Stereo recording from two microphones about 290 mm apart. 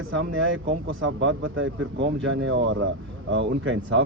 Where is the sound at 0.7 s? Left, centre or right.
Right.